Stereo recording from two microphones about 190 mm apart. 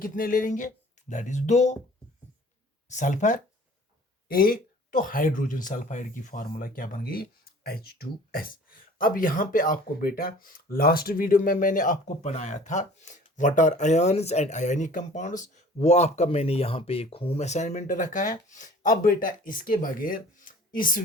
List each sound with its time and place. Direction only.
0.0 s speech: 45° left (ahead or behind)
2.9 s speech: 40° left (ahead or behind)